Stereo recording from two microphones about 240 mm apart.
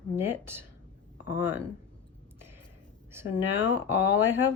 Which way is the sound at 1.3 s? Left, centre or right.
Centre.